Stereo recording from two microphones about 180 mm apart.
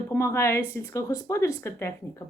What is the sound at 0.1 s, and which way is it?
Speech, 15° left (ahead or behind).